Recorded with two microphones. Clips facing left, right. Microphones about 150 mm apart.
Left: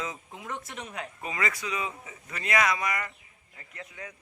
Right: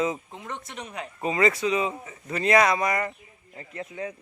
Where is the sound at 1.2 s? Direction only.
25° right (ahead or behind).